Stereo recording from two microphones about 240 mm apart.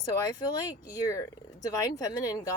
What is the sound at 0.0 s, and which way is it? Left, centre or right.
A woman's voice, centre.